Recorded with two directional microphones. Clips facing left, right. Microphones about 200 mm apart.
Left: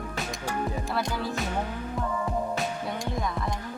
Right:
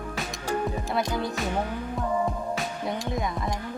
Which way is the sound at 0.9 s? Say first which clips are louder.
Right 4 dB; 20° right (ahead or behind).